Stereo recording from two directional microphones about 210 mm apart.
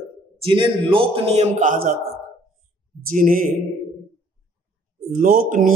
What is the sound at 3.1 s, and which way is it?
Speech, 40° right (ahead or behind).